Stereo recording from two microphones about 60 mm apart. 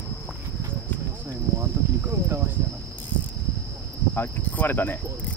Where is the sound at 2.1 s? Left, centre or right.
Right.